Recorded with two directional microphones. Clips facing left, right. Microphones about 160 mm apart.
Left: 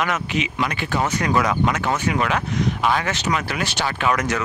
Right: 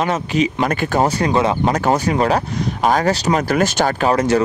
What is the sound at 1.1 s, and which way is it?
Speech, 30° right (ahead or behind).